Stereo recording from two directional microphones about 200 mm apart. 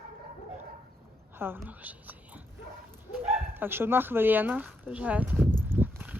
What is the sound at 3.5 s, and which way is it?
Speech, 10° right (ahead or behind).